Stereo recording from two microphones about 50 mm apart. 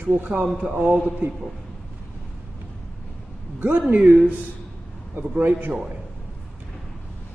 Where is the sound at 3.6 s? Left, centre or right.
Right.